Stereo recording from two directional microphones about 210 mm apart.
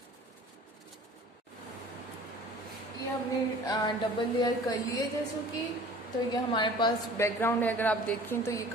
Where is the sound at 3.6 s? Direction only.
20° left (ahead or behind).